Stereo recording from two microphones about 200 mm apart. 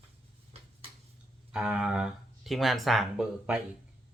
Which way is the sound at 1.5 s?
5° right (ahead or behind).